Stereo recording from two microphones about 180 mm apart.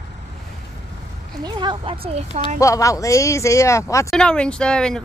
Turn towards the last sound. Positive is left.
turn(degrees=5)  # may be behind; listen again after turning